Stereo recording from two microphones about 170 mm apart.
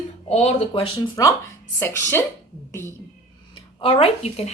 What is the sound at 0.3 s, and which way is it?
Speech, 40° left (ahead or behind).